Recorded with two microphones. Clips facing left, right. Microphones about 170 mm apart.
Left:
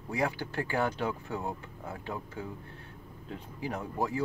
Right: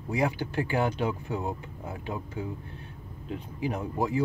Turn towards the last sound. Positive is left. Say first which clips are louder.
# right 4 dB
turn(degrees=-15)  # may be behind; listen again after turning